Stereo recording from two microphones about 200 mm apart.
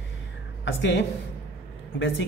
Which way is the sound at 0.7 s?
60° left (ahead or behind).